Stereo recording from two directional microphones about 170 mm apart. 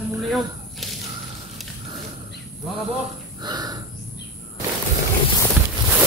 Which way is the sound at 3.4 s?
25° right (ahead or behind).